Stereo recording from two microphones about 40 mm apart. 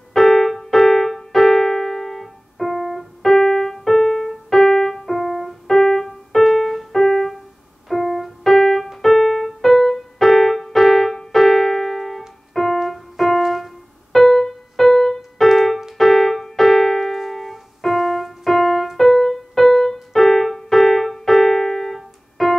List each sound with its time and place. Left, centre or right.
0.1 s keyboard: centre
8.8 s music: centre
15.5 s keyboard: centre